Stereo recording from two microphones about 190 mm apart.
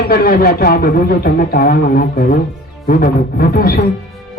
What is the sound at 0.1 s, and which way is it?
Speech, 50° left (ahead or behind).